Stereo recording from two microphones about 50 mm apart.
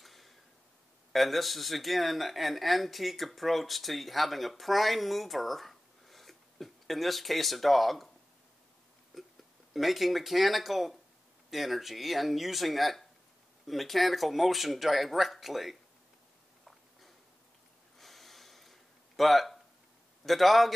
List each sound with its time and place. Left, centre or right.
0.0 s a sound: centre
1.1 s speech: centre
9.1 s hiccup: centre
9.8 s speech: centre
17.9 s gasp: centre
20.2 s speech: centre